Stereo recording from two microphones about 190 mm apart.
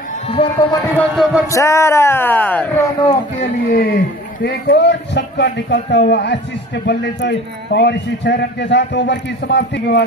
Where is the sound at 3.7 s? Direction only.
50° left (ahead or behind).